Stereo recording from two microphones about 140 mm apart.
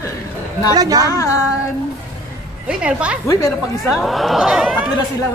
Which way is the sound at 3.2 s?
25° left (ahead or behind).